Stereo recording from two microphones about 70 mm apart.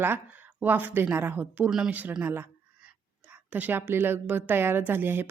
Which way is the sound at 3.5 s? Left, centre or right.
Right.